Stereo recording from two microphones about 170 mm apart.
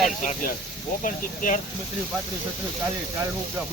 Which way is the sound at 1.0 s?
50° left (ahead or behind).